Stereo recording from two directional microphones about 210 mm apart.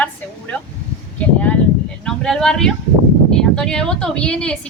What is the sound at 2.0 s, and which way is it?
Speech, centre (ahead or behind).